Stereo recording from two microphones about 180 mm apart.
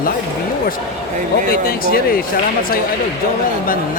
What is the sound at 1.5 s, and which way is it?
Speech, 55° left (ahead or behind).